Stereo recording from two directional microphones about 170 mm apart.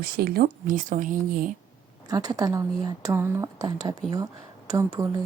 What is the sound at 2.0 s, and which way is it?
Speech, 20° right (ahead or behind).